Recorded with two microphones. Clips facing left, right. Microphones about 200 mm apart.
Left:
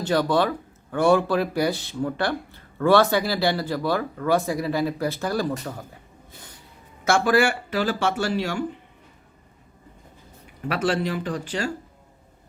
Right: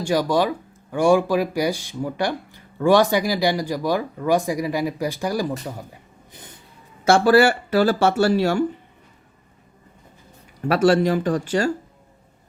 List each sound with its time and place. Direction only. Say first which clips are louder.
0.0 s speech: right 1 dB; 10° right (ahead or behind)
6.3 s snort: right 3 dB; 20° right (ahead or behind)
7.0 s speech: right 5 dB; 35° right (ahead or behind)
10.7 s speech: right 7 dB; 40° right (ahead or behind)